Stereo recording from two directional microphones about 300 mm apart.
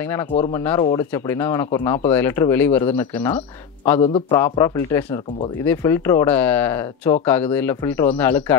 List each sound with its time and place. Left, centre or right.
0.0 s speech: centre